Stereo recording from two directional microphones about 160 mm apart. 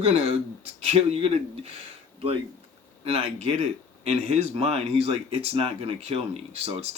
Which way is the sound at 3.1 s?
40° right (ahead or behind).